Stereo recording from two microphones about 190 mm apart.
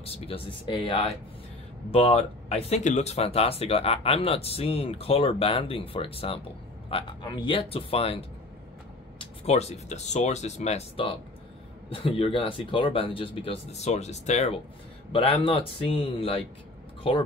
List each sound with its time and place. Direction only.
0.0 s speech: 30° left (ahead or behind)